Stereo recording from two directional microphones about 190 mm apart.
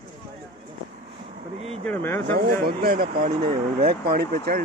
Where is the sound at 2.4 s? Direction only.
55° right (ahead or behind).